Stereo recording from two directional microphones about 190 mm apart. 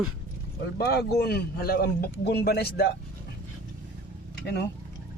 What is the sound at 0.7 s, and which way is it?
A man's voice, 55° left (ahead or behind).